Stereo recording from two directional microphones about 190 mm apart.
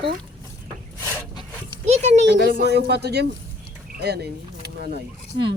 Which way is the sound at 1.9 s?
35° right (ahead or behind).